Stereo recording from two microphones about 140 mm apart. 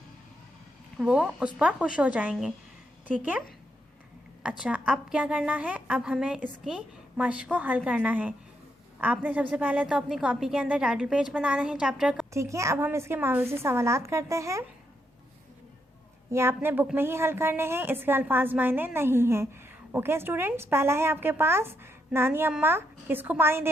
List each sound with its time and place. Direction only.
0.9 s a woman's voice: 5° right (ahead or behind)
4.4 s a woman's voice: 10° right (ahead or behind)
12.3 s a woman's voice: 20° right (ahead or behind)
16.3 s a woman's voice: 20° right (ahead or behind)